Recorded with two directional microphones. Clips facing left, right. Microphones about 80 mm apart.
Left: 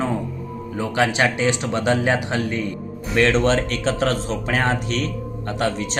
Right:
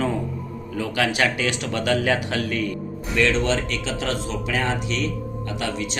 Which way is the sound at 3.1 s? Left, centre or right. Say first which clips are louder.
Left 4 dB; left.